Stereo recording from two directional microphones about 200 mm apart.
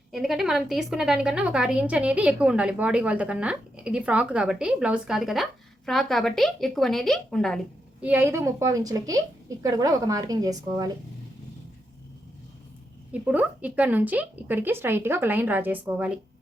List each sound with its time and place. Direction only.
0.1 s a woman's voice: centre (ahead or behind)
8.0 s speech: 10° right (ahead or behind)
13.2 s speech: 5° right (ahead or behind)